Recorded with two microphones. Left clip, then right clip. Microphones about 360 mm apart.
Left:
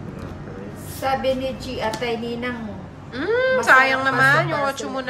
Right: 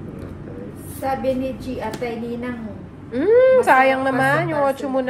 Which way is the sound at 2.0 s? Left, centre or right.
Left.